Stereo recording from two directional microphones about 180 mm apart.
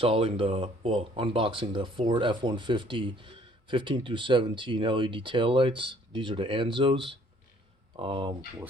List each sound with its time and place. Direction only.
0.0 s speech: 30° right (ahead or behind)